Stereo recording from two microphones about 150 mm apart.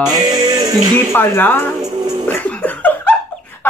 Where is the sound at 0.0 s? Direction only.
30° right (ahead or behind).